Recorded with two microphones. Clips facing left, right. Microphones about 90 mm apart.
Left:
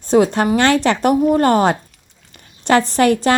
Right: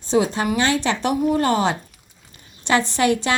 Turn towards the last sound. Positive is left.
turn(degrees=45)  # may be behind; listen again after turning